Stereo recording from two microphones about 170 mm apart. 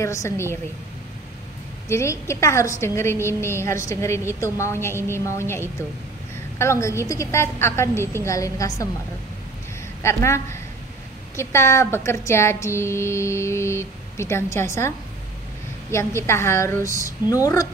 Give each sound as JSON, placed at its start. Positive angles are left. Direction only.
{"t": 0.0, "sound": "speech", "side_deg": 15}
{"t": 1.9, "sound": "speech", "side_deg": 15}
{"t": 6.6, "sound": "speech", "side_deg": 15}
{"t": 10.0, "sound": "speech", "side_deg": 15}